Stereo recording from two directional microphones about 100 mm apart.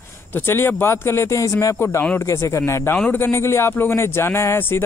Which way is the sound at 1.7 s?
20° left (ahead or behind).